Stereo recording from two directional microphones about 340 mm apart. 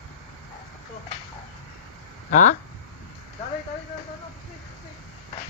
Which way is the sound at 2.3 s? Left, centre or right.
Left.